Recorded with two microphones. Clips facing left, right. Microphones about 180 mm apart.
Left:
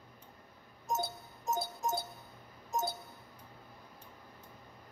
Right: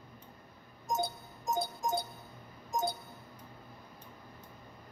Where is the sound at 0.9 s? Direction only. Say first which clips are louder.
Right 2 dB; 15° right (ahead or behind).